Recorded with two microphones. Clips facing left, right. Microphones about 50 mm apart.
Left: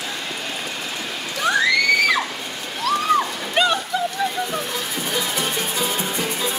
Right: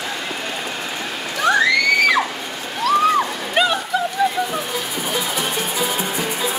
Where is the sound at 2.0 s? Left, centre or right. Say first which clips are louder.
Right 3 dB; centre.